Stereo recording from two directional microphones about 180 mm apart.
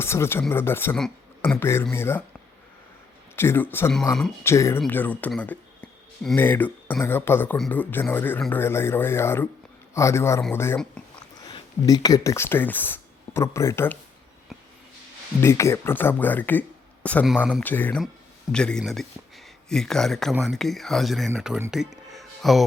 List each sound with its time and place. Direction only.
0.0 s speech: 15° left (ahead or behind)
3.3 s speech: 10° left (ahead or behind)
15.4 s speech: 15° left (ahead or behind); by 21.6 s 5° right (ahead or behind)
22.1 s music: centre (ahead or behind)